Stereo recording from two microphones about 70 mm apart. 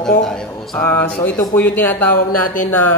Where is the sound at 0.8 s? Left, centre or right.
Left.